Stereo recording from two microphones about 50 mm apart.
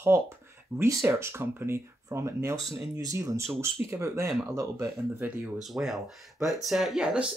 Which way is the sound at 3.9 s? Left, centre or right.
Right.